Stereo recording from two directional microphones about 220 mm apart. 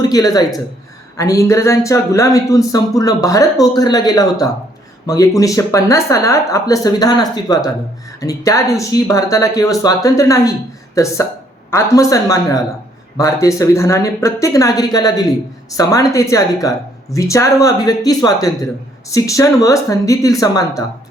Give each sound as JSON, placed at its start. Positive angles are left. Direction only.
{"t": 0.1, "sound": "speech", "side_deg": 15}